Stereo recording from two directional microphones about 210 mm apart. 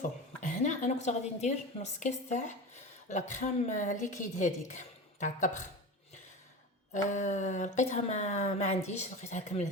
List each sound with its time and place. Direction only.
0.4 s a woman's voice: 35° left (ahead or behind)
6.9 s a woman's voice: 35° left (ahead or behind)